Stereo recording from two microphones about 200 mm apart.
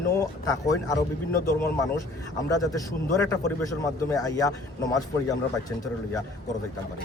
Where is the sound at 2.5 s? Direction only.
15° left (ahead or behind).